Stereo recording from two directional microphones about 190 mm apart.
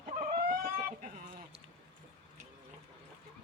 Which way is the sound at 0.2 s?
40° right (ahead or behind).